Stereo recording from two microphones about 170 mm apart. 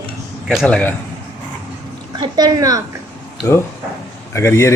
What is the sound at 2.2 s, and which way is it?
Speech, 25° right (ahead or behind).